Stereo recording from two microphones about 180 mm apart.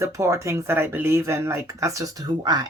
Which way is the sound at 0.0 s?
15° right (ahead or behind).